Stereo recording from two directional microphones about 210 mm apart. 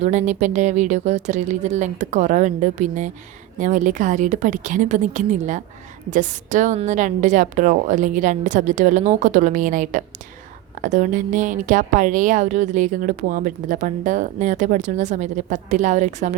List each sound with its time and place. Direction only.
0.0 s a woman's voice: 35° right (ahead or behind)